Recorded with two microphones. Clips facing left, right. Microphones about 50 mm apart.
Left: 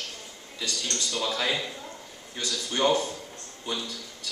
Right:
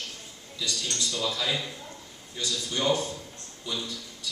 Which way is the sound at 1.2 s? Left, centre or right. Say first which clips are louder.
Left 2 dB; left.